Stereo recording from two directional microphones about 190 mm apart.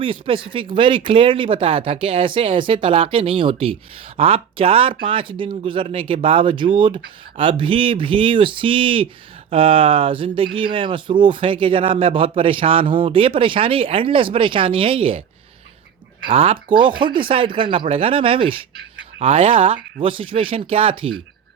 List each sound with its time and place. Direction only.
0.0 s a man's voice: 25° right (ahead or behind)
16.3 s a man's voice: 30° right (ahead or behind)